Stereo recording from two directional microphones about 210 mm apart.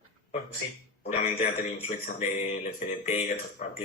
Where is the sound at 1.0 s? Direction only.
35° left (ahead or behind).